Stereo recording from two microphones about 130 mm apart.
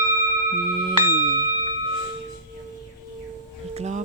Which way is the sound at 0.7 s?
35° right (ahead or behind).